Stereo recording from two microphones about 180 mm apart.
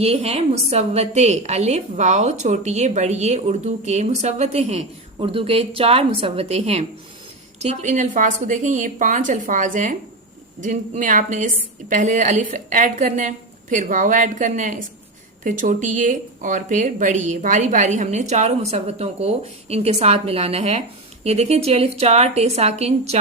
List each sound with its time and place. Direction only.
0.0 s a woman's voice: 35° right (ahead or behind)